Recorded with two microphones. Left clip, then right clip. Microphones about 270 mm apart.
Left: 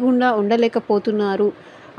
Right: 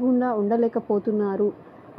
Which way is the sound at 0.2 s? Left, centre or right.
Left.